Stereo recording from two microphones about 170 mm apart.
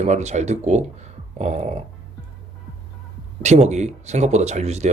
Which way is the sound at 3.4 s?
40° right (ahead or behind).